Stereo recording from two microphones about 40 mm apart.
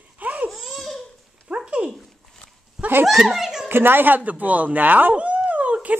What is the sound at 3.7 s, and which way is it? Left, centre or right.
Speech, right.